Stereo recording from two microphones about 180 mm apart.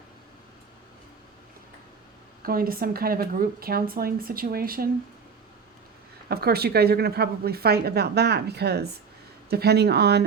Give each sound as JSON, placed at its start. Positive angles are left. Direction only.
{"t": 2.4, "sound": "speech", "side_deg": -55}
{"t": 6.2, "sound": "speech", "side_deg": -60}